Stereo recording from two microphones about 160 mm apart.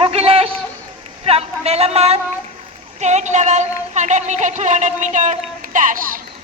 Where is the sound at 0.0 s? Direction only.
40° right (ahead or behind).